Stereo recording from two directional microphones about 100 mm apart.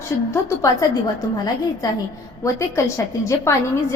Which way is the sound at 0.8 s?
35° left (ahead or behind).